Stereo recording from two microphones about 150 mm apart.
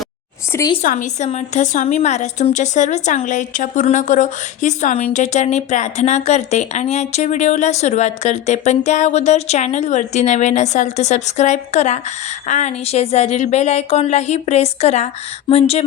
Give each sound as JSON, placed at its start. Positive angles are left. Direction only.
{"t": 0.8, "sound": "a woman's voice", "side_deg": 55}